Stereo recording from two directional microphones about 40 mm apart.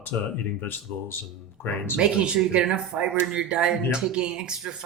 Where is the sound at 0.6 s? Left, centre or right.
Left.